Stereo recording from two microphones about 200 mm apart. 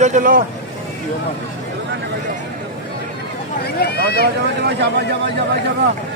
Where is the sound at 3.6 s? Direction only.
55° left (ahead or behind).